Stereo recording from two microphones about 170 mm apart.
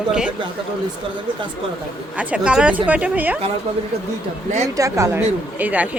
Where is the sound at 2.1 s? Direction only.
5° right (ahead or behind).